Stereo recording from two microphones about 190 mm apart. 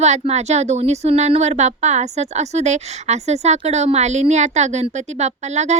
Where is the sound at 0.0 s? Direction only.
35° right (ahead or behind).